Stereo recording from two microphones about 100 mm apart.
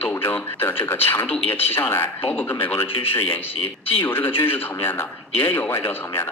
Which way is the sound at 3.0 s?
65° left (ahead or behind).